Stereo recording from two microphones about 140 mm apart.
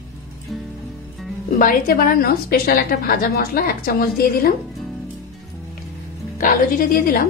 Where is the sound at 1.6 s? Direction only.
85° left.